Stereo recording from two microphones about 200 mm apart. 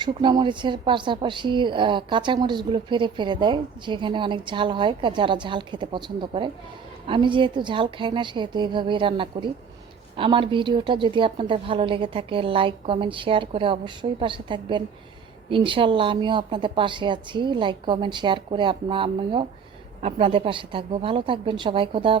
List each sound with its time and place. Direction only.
0.0 s speech: 20° right (ahead or behind)